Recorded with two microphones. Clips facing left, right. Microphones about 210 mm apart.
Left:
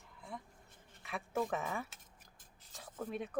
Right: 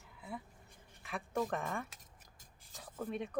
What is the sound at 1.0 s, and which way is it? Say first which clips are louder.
Speech: even; centre (ahead or behind).